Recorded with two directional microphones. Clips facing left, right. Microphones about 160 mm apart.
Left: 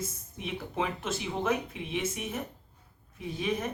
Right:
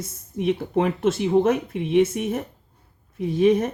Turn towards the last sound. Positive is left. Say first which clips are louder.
# right 13 dB
turn(degrees=-55)  # may be behind; listen again after turning